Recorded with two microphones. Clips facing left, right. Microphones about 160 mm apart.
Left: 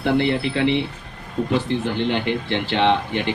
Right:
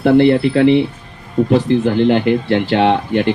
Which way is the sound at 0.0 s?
45° right (ahead or behind).